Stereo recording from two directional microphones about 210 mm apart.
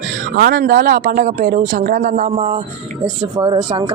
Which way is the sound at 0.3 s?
45° right (ahead or behind).